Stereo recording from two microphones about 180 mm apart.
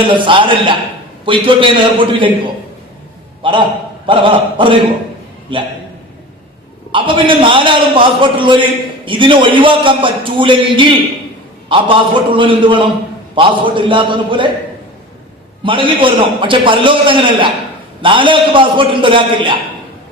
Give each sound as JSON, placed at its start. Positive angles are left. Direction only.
{"t": 0.1, "sound": "a man's voice", "side_deg": -25}
{"t": 6.9, "sound": "a man's voice", "side_deg": -30}
{"t": 15.6, "sound": "a man's voice", "side_deg": -30}